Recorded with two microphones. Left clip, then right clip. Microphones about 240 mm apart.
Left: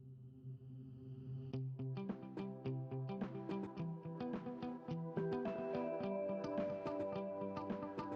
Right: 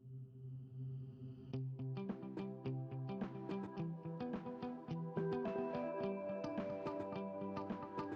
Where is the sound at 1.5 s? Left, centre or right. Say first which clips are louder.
Even; centre.